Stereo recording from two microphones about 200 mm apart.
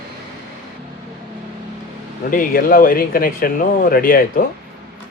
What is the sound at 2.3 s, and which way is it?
Speech, 45° left (ahead or behind).